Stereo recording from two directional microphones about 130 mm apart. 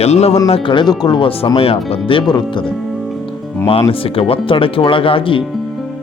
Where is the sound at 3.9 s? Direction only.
45° left (ahead or behind).